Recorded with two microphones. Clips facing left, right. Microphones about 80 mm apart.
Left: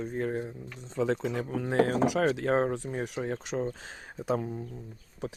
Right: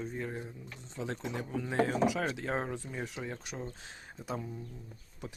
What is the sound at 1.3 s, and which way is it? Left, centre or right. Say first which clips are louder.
Speech: left 5 dB; left.